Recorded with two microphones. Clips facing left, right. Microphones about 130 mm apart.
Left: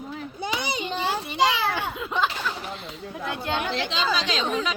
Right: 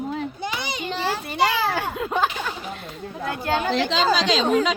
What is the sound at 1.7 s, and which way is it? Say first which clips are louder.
Speech: right 3 dB; 50° right (ahead or behind).